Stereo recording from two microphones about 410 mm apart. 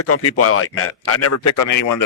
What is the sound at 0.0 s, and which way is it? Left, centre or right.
Speech, left.